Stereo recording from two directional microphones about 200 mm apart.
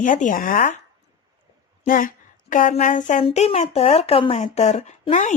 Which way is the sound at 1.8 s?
45° left (ahead or behind).